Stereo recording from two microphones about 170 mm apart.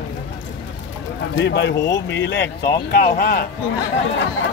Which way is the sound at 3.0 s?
65° left (ahead or behind).